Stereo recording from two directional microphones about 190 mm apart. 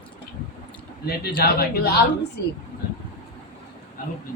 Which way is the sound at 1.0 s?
55° left (ahead or behind).